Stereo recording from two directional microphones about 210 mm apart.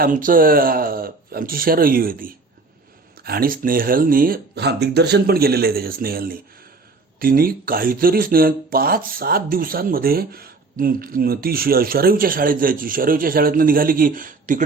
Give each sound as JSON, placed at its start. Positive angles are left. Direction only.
{"t": 0.0, "sound": "speech", "side_deg": -40}